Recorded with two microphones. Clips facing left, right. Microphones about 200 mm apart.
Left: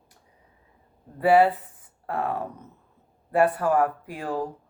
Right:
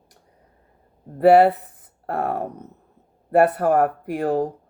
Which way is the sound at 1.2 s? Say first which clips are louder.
Right 5 dB; 65° right (ahead or behind).